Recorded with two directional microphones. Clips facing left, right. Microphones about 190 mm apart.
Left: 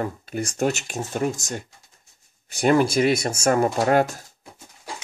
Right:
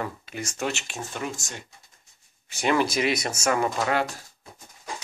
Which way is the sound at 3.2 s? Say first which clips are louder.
Left 4 dB; 30° left (ahead or behind).